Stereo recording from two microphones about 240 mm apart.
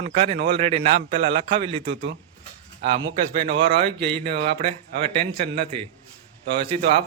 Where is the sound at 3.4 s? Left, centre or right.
Right.